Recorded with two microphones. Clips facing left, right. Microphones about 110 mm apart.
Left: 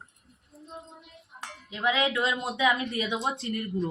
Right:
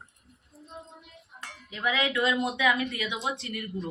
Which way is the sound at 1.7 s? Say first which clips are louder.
Left 2 dB; 25° left (ahead or behind).